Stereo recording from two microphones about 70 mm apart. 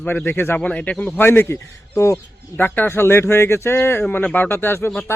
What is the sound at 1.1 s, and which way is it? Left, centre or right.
Speech, left.